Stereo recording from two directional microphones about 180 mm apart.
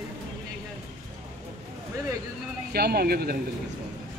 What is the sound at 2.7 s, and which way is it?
Speech, 60° right (ahead or behind).